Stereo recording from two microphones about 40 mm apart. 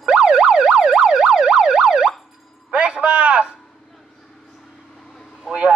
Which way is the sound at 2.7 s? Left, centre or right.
Right.